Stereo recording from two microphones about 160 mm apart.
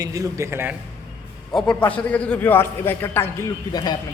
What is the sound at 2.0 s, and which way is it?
A man's voice, 10° left (ahead or behind).